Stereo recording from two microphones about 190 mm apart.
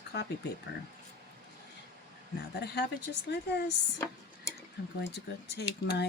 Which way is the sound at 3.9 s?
20° left (ahead or behind).